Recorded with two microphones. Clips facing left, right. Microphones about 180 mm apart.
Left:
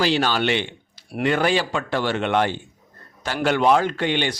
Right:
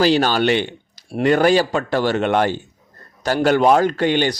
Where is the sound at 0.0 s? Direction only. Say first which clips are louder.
Right 5 dB; 40° right (ahead or behind).